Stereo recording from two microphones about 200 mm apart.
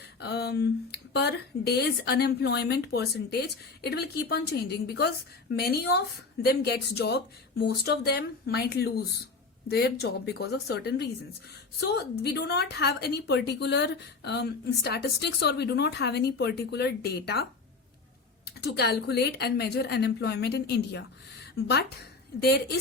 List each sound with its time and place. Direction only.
0.2 s a woman's voice: 55° left (ahead or behind)
18.4 s a woman's voice: 55° left (ahead or behind)